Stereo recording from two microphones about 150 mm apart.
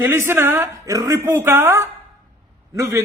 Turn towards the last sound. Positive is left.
turn(degrees=-20)  # may be behind; listen again after turning